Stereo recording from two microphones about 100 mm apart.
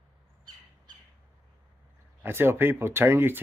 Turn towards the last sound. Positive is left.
turn(degrees=-25)  # may be behind; listen again after turning